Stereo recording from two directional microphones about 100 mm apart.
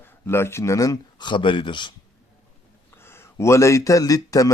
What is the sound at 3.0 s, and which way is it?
Speech, 25° left (ahead or behind).